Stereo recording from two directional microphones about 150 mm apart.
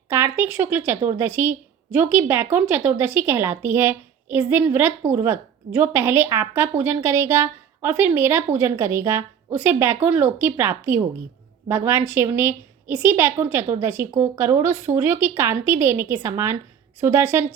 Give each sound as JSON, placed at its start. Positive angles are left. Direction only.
{"t": 0.1, "sound": "speech", "side_deg": -15}